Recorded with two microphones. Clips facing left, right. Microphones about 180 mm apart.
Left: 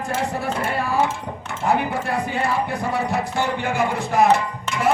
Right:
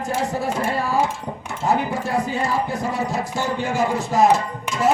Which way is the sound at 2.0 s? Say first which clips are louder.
Right 1 dB; 60° left (ahead or behind).